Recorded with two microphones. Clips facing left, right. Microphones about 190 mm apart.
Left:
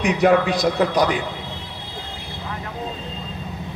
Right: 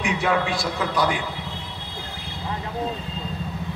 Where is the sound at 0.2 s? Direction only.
40° left (ahead or behind).